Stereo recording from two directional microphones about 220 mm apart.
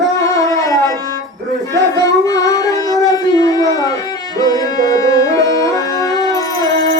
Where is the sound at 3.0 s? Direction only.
15° left (ahead or behind).